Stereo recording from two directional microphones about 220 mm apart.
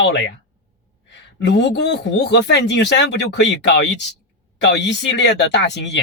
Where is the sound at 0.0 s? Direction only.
55° left (ahead or behind).